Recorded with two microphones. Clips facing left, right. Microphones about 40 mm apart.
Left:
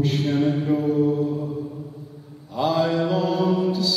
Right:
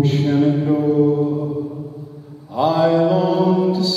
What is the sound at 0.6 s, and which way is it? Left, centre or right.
Mantra, right.